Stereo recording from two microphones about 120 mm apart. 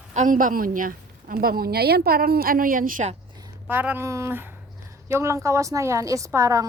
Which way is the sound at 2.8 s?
90° right.